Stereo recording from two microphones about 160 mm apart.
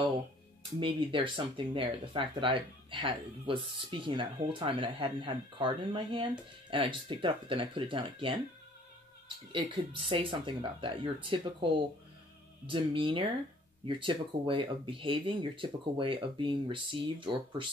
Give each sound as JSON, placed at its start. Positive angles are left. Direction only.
{"t": 0.7, "sound": "speech", "side_deg": -30}
{"t": 9.5, "sound": "speech", "side_deg": -30}